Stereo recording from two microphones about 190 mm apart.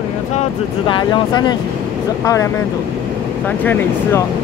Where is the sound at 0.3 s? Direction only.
30° left (ahead or behind).